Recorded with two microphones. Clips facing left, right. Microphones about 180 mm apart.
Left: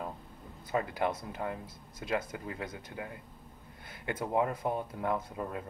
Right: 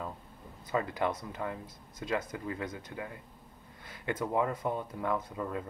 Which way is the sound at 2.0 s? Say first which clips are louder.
Even; 10° left (ahead or behind).